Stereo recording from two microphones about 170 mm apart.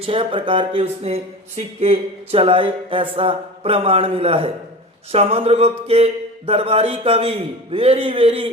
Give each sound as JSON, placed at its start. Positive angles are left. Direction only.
{"t": 0.0, "sound": "speech", "side_deg": -30}